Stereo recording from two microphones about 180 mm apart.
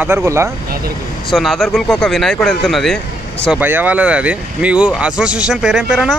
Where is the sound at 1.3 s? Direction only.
Centre (ahead or behind).